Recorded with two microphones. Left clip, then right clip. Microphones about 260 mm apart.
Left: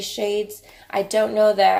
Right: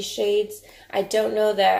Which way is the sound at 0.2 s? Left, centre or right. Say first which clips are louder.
Right 2 dB; left.